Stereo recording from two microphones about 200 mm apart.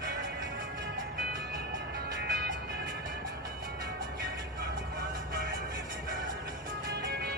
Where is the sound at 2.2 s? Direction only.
55° right (ahead or behind).